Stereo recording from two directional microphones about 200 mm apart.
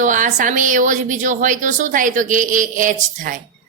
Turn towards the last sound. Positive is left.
turn(degrees=-40)  # may be behind; listen again after turning